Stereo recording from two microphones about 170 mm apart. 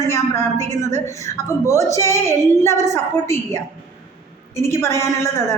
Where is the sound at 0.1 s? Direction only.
15° left (ahead or behind).